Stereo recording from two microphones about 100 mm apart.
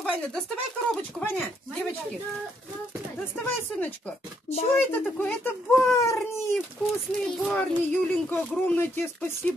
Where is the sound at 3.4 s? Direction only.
20° left (ahead or behind).